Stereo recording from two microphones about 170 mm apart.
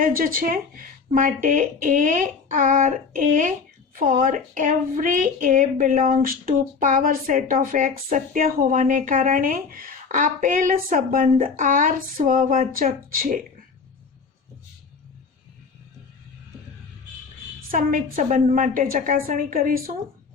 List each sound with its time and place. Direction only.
0.0 s a woman's voice: 55° right (ahead or behind)
17.7 s a woman's voice: 55° right (ahead or behind)